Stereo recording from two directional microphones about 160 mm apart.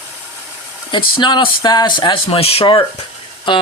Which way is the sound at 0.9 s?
30° left (ahead or behind).